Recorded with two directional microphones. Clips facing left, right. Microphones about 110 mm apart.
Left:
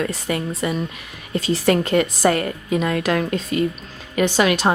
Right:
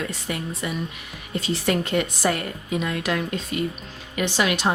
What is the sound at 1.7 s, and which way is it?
Speech, 90° left.